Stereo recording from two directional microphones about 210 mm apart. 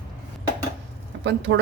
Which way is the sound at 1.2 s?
60° right (ahead or behind).